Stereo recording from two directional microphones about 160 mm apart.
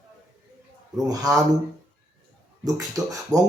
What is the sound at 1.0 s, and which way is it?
Speech, 20° right (ahead or behind).